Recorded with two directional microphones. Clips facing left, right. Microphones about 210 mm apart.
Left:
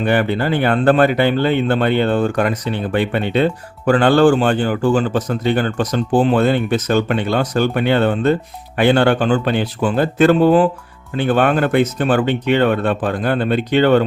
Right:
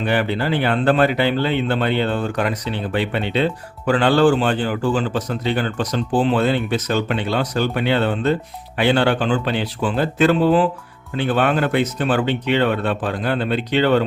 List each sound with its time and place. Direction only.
0.0 s speech: 50° left (ahead or behind)